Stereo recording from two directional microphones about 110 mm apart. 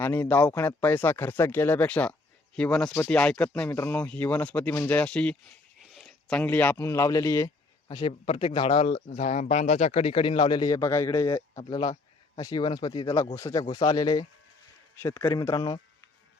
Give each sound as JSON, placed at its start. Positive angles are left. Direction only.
{"t": 0.0, "sound": "speech", "side_deg": 15}
{"t": 7.9, "sound": "speech", "side_deg": 40}
{"t": 8.2, "sound": "speech", "side_deg": 60}
{"t": 11.5, "sound": "speech", "side_deg": 45}
{"t": 13.3, "sound": "speech", "side_deg": 30}
{"t": 15.4, "sound": "speech", "side_deg": 35}